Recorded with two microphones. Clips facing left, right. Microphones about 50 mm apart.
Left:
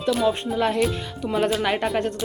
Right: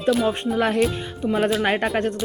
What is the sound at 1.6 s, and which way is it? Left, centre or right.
Speech, right.